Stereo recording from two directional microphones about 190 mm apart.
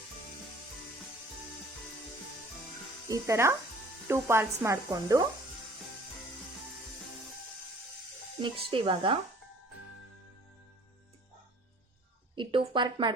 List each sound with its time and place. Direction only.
3.1 s speech: 15° right (ahead or behind)
8.4 s speech: 25° right (ahead or behind)
12.4 s a woman's voice: 25° right (ahead or behind)